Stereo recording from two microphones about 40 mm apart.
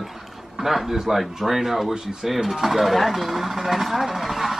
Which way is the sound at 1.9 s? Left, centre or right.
Centre.